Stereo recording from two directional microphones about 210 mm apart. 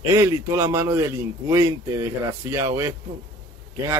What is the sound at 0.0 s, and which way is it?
Speech, 15° right (ahead or behind).